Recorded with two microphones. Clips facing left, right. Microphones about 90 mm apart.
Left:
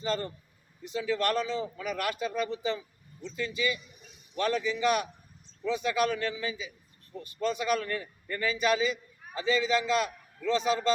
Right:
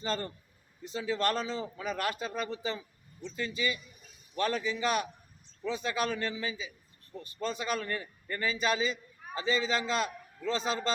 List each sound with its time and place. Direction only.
0.0 s a man's voice: 35° right (ahead or behind)